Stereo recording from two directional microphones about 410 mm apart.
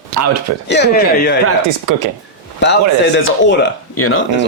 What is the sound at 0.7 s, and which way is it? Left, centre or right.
Speech, left.